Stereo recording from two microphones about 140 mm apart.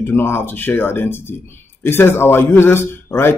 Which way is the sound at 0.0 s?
15° left (ahead or behind).